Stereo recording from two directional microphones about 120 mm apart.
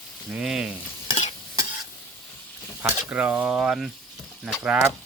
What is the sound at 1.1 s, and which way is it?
Stir, 80° left.